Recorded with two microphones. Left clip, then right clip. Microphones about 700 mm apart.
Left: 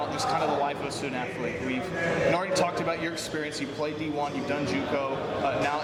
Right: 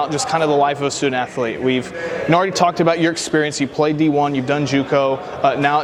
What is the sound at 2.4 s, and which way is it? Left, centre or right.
Speech, right.